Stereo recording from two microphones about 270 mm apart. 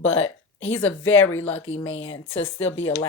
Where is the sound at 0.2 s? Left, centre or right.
Left.